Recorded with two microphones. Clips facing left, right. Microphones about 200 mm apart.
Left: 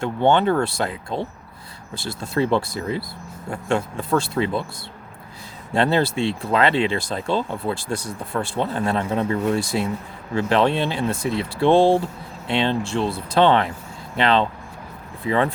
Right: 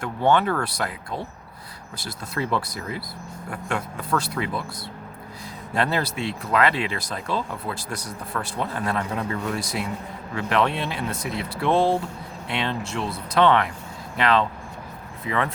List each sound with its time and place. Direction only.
0.0 s speech: 25° left (ahead or behind)
5.7 s speech: 25° left (ahead or behind)